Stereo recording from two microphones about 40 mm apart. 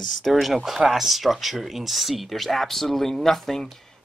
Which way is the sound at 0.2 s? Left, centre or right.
Centre.